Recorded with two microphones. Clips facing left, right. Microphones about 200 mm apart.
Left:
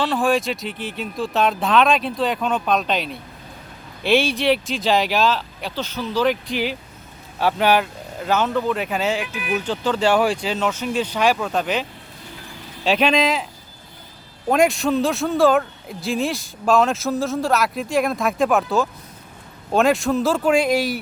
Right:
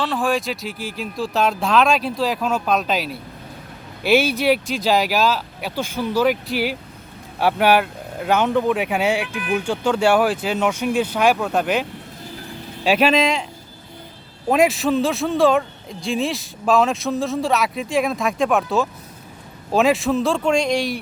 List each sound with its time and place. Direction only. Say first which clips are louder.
0.0 s speech: left 2 dB; centre (ahead or behind)